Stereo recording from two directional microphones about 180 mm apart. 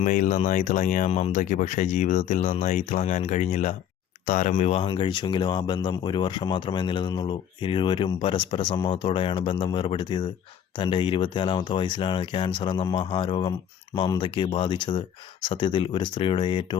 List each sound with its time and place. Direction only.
0.0 s speech: 45° left (ahead or behind); by 16.7 s 30° left (ahead or behind)